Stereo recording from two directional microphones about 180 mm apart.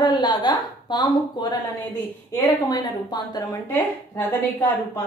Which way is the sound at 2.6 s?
20° left (ahead or behind).